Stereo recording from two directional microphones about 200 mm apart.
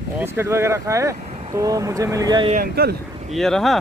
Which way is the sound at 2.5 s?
50° right (ahead or behind).